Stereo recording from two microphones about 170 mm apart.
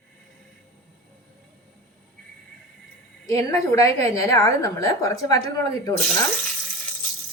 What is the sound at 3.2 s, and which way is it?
A woman's voice, 20° left (ahead or behind).